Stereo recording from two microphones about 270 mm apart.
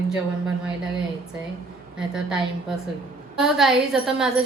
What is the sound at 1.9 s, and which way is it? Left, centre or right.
Speech, centre.